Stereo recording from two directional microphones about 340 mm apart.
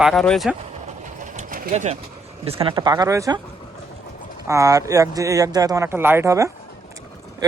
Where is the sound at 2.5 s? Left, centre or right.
Centre.